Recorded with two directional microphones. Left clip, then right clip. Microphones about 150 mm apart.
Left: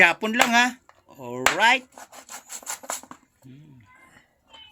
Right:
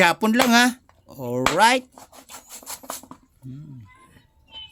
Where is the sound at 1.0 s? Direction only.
55° right (ahead or behind).